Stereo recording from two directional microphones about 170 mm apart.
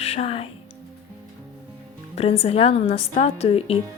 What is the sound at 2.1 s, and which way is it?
A woman's voice, 35° left (ahead or behind).